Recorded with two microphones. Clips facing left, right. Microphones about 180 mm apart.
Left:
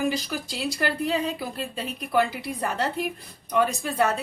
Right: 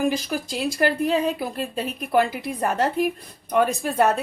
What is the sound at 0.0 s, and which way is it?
Speech, 50° right (ahead or behind).